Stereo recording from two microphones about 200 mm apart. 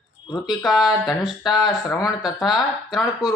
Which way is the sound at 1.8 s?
15° left (ahead or behind).